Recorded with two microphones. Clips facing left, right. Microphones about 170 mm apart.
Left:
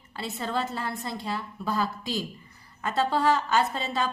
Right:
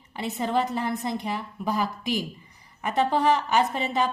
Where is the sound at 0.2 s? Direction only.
15° right (ahead or behind).